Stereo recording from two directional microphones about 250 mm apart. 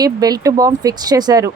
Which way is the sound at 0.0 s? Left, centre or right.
Centre.